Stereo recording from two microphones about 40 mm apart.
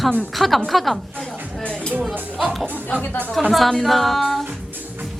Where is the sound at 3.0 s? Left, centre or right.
Left.